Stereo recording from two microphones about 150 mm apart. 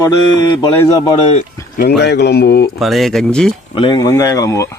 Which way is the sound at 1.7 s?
85° left.